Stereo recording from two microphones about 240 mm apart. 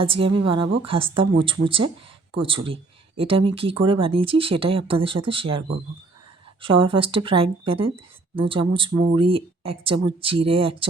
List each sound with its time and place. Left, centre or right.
0.0 s speech: right